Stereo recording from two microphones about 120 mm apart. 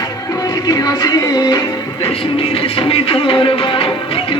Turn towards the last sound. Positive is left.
turn(degrees=50)  # may be behind; listen again after turning